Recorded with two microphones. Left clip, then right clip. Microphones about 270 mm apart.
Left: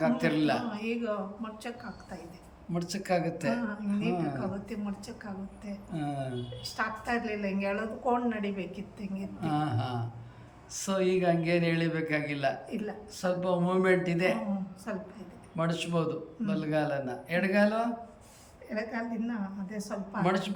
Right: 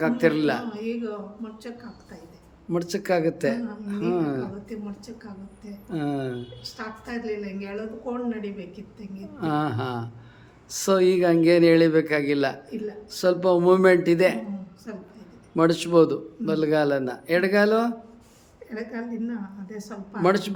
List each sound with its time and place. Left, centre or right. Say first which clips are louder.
0.0 s speech: right 6 dB; centre
0.7 s a woman's voice: right 3 dB; centre
2.7 s speech: right 7 dB; centre
5.9 s speech: right 7 dB; centre
6.6 s a woman's voice: left 3 dB; centre
9.4 s a man's voice: right 6 dB; centre
14.9 s a woman's voice: left 2 dB; centre
15.5 s a man's voice: right 13 dB; centre
18.7 s a woman's voice: right 1 dB; centre
20.2 s a man's voice: right 9 dB; centre